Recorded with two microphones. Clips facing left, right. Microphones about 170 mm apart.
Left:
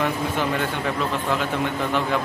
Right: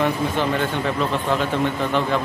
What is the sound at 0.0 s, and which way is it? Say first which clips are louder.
A man's voice: right 3 dB; 5° left (ahead or behind).